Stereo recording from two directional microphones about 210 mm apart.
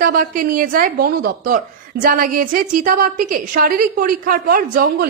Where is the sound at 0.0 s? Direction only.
40° right (ahead or behind).